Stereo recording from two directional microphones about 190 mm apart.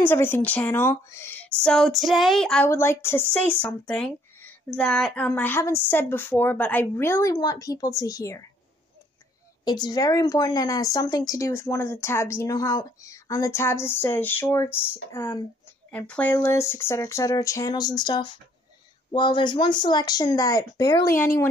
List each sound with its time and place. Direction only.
0.0 s a woman's voice: 10° left (ahead or behind)
1.6 s a woman's voice: 5° left (ahead or behind)
9.7 s a woman's voice: 20° left (ahead or behind)